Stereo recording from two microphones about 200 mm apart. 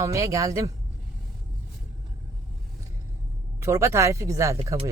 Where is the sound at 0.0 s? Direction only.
15° right (ahead or behind).